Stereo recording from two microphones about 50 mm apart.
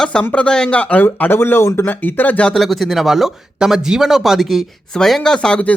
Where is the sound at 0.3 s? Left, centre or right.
Centre.